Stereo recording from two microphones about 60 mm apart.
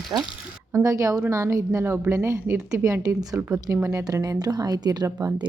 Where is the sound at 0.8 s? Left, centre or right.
Right.